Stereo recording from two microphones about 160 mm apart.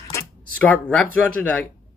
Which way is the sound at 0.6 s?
5° left (ahead or behind).